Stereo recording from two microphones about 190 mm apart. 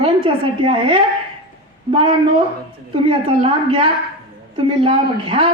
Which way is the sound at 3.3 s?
30° right (ahead or behind).